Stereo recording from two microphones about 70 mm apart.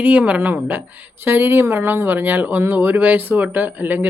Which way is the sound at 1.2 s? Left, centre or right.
Right.